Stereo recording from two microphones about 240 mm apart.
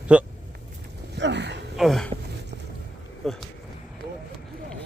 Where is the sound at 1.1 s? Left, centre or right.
Right.